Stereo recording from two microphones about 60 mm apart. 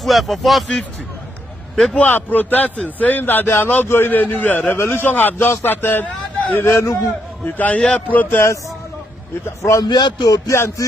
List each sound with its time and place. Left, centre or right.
0.0 s speech: centre
2.0 s a man's voice: left
4.2 s a man's voice: left
4.7 s a man's voice: left
6.0 s a sound: left
6.6 s music: left
7.4 s a man's voice: left
9.8 s a man's voice: left
10.5 s music: left